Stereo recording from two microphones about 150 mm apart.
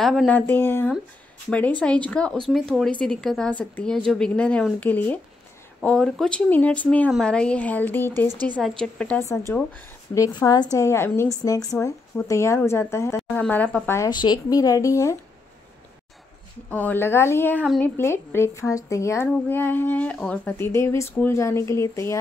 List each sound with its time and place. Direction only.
0.0 s speech: centre (ahead or behind)
0.5 s speech: 15° left (ahead or behind)
9.5 s a woman's voice: 15° left (ahead or behind)
13.9 s a woman's voice: 25° left (ahead or behind)
16.7 s a woman's voice: 10° left (ahead or behind)